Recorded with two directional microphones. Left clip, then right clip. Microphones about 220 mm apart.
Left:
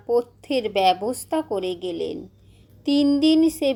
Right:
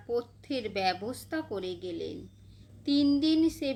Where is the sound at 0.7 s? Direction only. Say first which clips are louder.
Left 11 dB; 10° right (ahead or behind).